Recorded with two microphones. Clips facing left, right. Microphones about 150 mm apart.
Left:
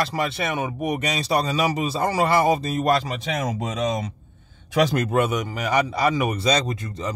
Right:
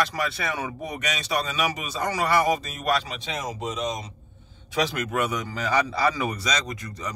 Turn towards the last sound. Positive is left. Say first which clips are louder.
# left 5 dB
turn(degrees=25)  # may be behind; listen again after turning